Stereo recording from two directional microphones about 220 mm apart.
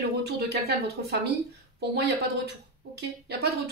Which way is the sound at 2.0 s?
50° right (ahead or behind).